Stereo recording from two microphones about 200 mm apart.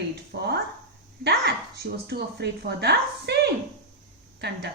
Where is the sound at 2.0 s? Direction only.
55° right (ahead or behind).